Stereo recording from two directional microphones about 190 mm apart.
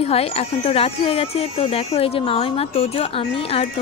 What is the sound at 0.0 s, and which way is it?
Speech, 30° left (ahead or behind).